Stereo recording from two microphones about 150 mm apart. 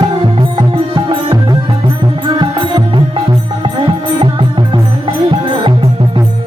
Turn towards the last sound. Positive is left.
turn(degrees=-35)  # may be behind; listen again after turning